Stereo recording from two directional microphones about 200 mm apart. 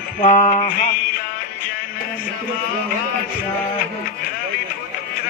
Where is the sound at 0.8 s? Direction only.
45° left (ahead or behind).